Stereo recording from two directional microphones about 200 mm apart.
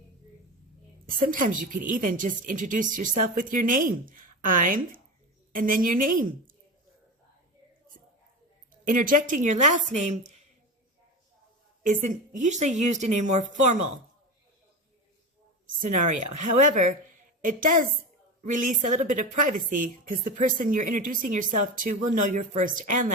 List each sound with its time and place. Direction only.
1.0 s a woman's voice: 45° right (ahead or behind)
8.7 s a woman's voice: 45° right (ahead or behind)
11.8 s a woman's voice: 40° right (ahead or behind)
15.8 s a woman's voice: 40° right (ahead or behind)